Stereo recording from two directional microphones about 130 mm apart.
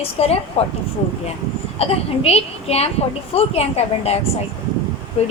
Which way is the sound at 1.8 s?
50° left (ahead or behind).